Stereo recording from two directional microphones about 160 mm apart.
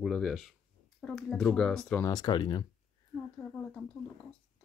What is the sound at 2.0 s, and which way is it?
Speech, 25° left (ahead or behind).